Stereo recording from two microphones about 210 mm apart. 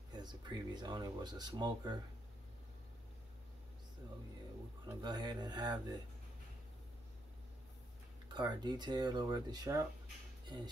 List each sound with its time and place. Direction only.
0.1 s speech: 20° right (ahead or behind)
5.0 s speech: 20° right (ahead or behind)
8.3 s speech: 20° right (ahead or behind)